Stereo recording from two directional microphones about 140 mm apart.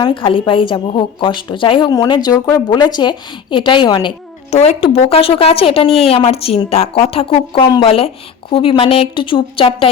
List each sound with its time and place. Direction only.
0.0 s a woman's voice: 35° left (ahead or behind)
4.5 s a woman's voice: 50° left (ahead or behind)